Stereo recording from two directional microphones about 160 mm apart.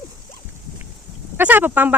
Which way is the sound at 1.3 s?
10° right (ahead or behind).